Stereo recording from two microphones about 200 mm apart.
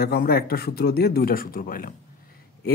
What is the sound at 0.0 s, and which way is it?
A man's voice, 50° left (ahead or behind).